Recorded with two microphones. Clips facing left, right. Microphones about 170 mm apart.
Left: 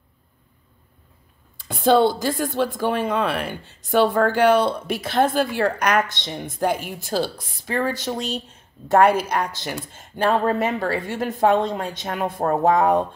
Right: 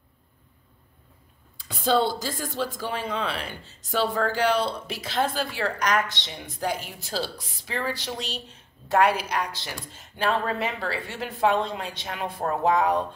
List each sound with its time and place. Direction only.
1.7 s speech: 60° left (ahead or behind)